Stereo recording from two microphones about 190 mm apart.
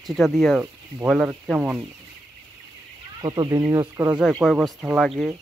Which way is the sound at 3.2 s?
25° right (ahead or behind).